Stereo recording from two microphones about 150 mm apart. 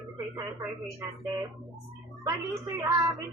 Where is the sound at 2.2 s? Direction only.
20° right (ahead or behind).